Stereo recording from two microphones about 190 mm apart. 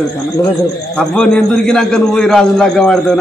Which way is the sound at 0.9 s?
5° left (ahead or behind).